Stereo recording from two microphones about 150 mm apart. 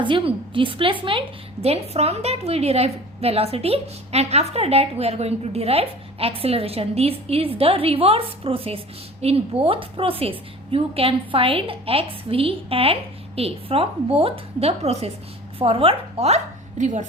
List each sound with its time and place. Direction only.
0.0 s a woman's voice: 35° right (ahead or behind); by 17.1 s 55° right (ahead or behind)